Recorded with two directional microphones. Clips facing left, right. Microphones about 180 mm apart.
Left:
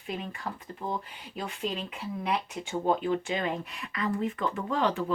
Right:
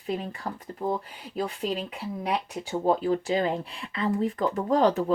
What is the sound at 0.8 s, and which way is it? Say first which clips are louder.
Speech: right 6 dB; 40° right (ahead or behind).